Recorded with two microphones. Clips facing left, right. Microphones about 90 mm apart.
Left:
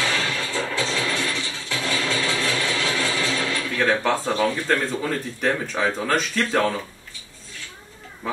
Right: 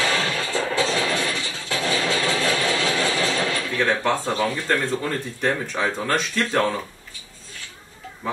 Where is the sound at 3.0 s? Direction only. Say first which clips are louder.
Right 2 dB; 50° right (ahead or behind).